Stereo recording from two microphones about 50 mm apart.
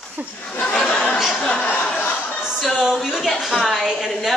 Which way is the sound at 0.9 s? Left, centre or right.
Left.